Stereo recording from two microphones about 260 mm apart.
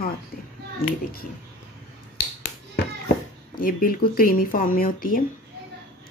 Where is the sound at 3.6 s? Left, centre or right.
Left.